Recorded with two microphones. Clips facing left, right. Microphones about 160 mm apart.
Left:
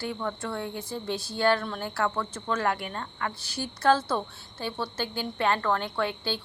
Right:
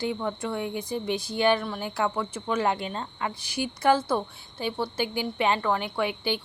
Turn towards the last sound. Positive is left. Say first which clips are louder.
# right 2 dB
turn(degrees=-15)  # may be behind; listen again after turning